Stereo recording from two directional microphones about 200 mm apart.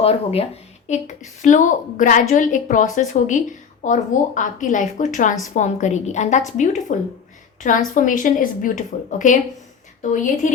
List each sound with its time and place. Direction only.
0.0 s a woman's voice: 30° left (ahead or behind)
7.9 s a woman's voice: 40° left (ahead or behind)